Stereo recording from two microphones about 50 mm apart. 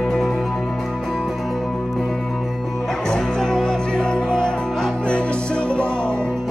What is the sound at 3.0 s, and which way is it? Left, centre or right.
Music, centre.